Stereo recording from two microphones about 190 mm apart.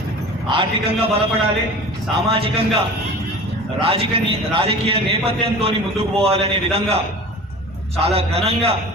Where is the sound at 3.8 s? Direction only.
30° right (ahead or behind).